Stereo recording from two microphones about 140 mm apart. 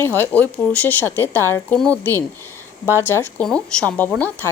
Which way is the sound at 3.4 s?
5° left (ahead or behind).